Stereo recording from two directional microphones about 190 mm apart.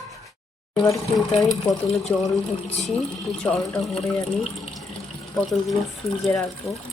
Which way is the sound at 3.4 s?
5° left (ahead or behind).